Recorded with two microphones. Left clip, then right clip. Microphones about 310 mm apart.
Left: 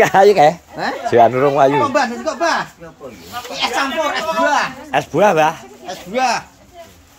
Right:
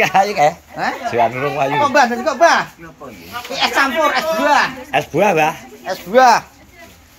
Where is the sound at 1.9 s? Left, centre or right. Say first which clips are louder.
Right 4 dB; centre.